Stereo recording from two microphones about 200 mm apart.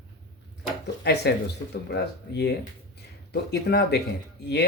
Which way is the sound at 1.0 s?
55° left (ahead or behind).